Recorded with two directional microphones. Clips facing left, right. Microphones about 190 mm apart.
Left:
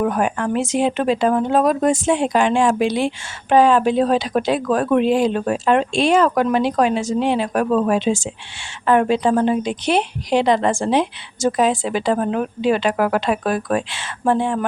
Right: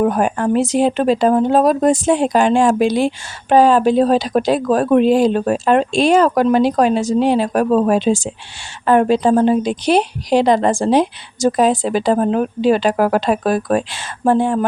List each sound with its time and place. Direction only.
0.0 s a woman's voice: 35° right (ahead or behind)